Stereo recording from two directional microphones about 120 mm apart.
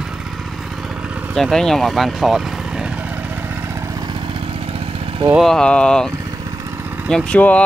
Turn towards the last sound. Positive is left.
turn(degrees=10)  # may be behind; listen again after turning